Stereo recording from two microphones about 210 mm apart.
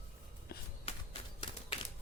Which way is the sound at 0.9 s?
30° left (ahead or behind).